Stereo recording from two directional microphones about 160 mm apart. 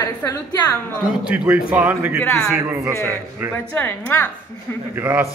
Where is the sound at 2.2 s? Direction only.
5° left (ahead or behind).